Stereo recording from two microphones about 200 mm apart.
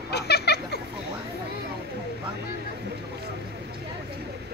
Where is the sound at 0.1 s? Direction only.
55° left (ahead or behind).